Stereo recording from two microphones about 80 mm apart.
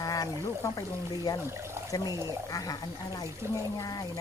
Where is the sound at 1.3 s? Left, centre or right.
Left.